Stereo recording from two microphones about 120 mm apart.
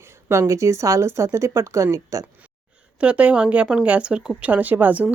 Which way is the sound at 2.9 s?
10° right (ahead or behind).